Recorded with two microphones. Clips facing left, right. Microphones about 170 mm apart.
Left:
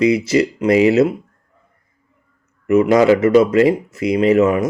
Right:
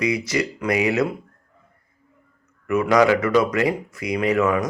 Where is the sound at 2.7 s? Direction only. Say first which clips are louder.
Left 5 dB; 25° left (ahead or behind).